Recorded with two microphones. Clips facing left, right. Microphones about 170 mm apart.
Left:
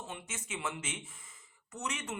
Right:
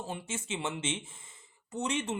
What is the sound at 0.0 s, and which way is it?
Speech, 30° right (ahead or behind).